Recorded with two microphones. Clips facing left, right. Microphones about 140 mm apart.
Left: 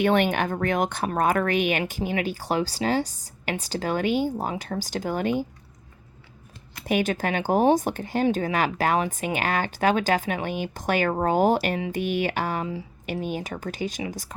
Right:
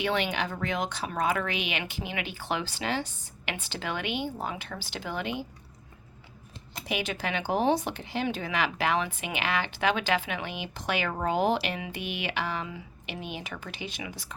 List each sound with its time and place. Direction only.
0.0 s speech: 50° left (ahead or behind)
6.8 s speech: 45° left (ahead or behind)